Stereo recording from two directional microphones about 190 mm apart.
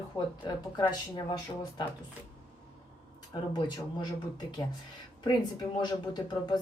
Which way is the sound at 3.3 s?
20° left (ahead or behind).